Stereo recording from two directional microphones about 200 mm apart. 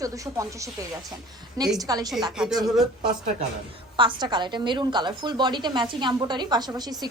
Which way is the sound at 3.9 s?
25° right (ahead or behind).